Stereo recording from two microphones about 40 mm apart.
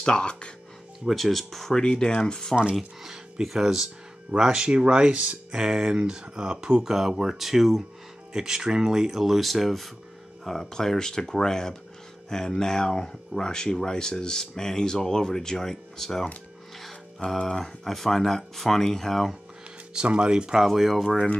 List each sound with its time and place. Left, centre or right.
0.0 s speech: left
1.0 s speech: centre
1.8 s speech: centre
3.0 s speech: centre
5.5 s speech: centre
5.9 s speech: right
6.9 s speech: centre
17.4 s speech: centre
19.9 s speech: right
20.5 s speech: centre